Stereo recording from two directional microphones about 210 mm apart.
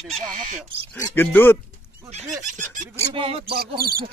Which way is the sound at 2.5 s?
35° right (ahead or behind).